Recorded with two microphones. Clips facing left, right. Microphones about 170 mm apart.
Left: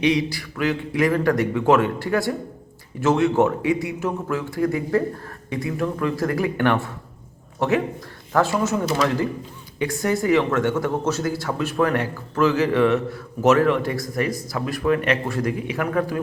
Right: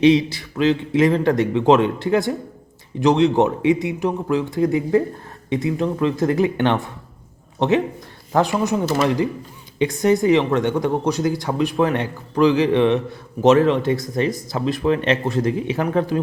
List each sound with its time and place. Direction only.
0.0 s speech: 25° right (ahead or behind)